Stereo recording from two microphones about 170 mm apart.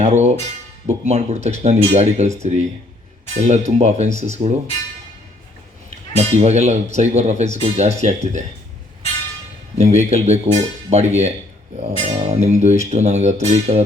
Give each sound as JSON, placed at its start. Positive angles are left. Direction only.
{"t": 0.0, "sound": "speech", "side_deg": -40}
{"t": 6.1, "sound": "speech", "side_deg": -40}
{"t": 9.7, "sound": "speech", "side_deg": -40}